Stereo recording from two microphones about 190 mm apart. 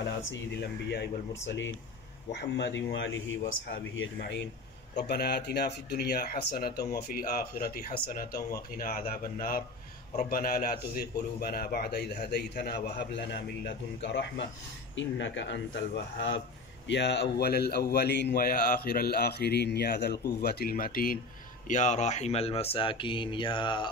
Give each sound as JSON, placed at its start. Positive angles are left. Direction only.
{"t": 0.2, "sound": "speech", "side_deg": 70}
{"t": 2.3, "sound": "speech", "side_deg": 65}
{"t": 4.9, "sound": "speech", "side_deg": 60}